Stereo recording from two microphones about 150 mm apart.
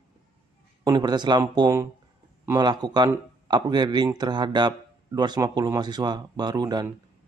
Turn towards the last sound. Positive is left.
turn(degrees=-25)  # may be behind; listen again after turning